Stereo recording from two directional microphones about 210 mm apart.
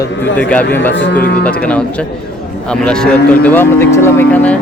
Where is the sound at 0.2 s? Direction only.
5° left (ahead or behind).